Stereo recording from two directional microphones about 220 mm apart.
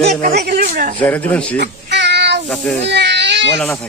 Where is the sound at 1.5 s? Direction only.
50° right (ahead or behind).